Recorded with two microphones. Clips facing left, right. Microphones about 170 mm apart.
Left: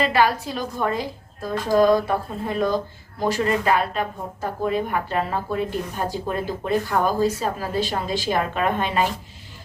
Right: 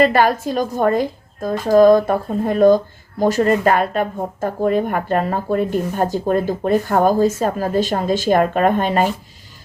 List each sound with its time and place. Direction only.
0.0 s a woman's voice: 45° right (ahead or behind)